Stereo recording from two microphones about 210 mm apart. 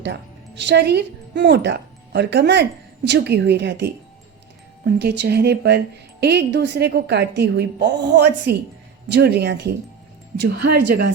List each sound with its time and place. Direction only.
0.0 s speech: 55° right (ahead or behind)